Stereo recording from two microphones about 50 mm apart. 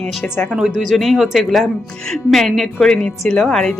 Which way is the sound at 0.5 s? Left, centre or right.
Centre.